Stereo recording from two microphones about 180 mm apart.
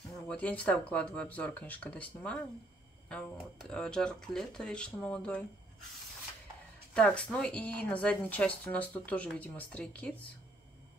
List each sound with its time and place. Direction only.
0.3 s speech: 5° left (ahead or behind)
6.9 s speech: 5° left (ahead or behind)